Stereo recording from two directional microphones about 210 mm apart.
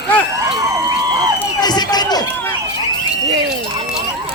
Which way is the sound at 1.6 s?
20° left (ahead or behind).